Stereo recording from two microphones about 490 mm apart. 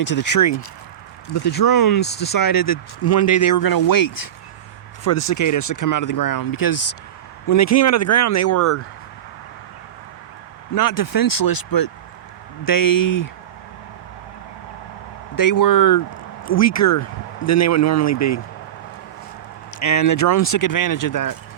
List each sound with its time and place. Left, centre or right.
0.0 s speech: left
10.8 s speech: left
15.4 s speech: left
19.8 s speech: left